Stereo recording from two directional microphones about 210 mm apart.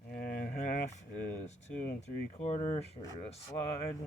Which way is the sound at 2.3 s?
30° left (ahead or behind).